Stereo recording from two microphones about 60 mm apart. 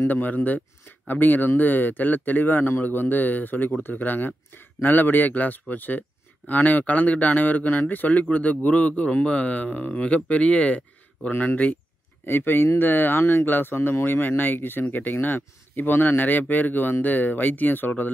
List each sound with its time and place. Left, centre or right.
0.0 s speech: left
12.3 s speech: left